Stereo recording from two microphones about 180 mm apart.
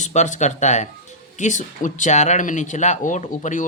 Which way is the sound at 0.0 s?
40° left (ahead or behind).